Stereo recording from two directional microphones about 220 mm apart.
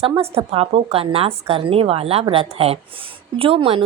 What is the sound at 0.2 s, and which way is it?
A woman's voice, 25° right (ahead or behind).